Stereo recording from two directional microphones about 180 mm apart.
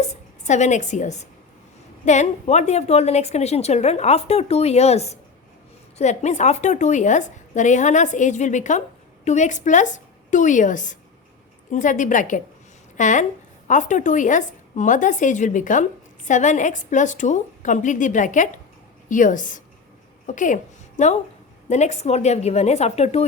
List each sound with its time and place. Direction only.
0.0 s a woman's voice: 40° left (ahead or behind)